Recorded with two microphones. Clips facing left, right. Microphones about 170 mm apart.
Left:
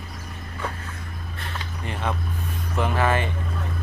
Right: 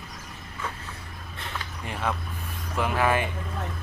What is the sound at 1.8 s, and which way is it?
Vehicle, 5° right (ahead or behind).